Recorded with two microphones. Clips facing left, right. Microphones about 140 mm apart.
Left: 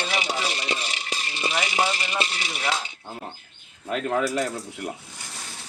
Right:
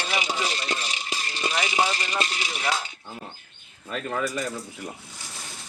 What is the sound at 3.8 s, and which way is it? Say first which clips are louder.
Speech: left 4 dB; 75° left (ahead or behind).